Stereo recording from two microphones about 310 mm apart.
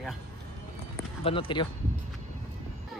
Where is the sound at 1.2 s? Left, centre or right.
Centre.